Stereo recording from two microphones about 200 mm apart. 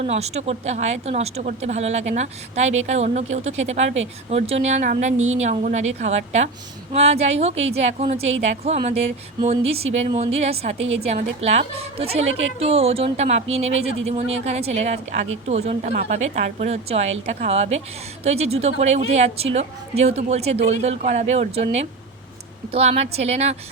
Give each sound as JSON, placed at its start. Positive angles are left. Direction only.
{"t": 0.0, "sound": "a woman's voice", "side_deg": -35}